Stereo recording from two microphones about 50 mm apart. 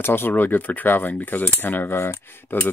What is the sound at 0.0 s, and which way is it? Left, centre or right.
Speech, left.